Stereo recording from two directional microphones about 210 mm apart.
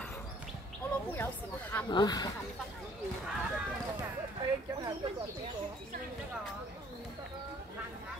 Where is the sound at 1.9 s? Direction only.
20° left (ahead or behind).